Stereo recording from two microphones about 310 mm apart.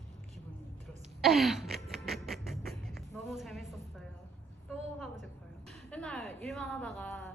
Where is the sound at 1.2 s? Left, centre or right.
Centre.